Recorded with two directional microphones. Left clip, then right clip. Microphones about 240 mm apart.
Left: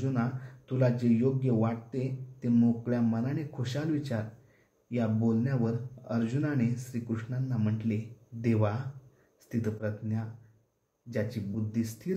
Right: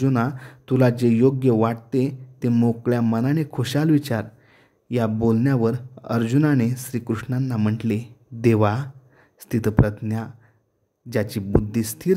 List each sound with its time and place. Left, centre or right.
0.0 s speech: right